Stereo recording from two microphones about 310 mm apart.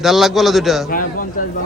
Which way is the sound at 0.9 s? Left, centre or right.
Left.